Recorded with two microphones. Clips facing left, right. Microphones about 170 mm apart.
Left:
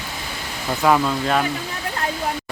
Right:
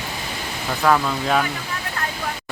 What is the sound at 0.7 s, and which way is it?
Speech, 10° left (ahead or behind).